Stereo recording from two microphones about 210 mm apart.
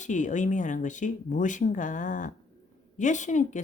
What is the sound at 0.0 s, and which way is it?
A woman's voice, 35° left (ahead or behind).